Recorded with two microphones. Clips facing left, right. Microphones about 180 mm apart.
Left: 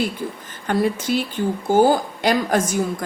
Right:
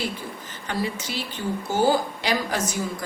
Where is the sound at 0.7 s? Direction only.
55° left (ahead or behind).